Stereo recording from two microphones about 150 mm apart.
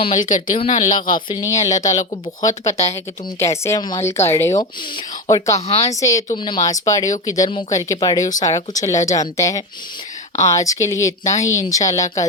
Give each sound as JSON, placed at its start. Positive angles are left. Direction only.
{"t": 0.3, "sound": "speech", "side_deg": 55}
{"t": 1.0, "sound": "speech", "side_deg": 30}
{"t": 5.5, "sound": "speech", "side_deg": 45}
{"t": 5.8, "sound": "speech", "side_deg": 20}